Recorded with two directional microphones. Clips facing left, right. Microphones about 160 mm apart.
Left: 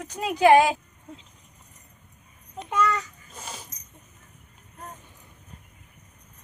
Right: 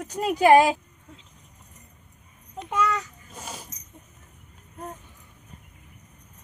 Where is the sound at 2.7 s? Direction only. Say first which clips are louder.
Left 1 dB; 5° right (ahead or behind).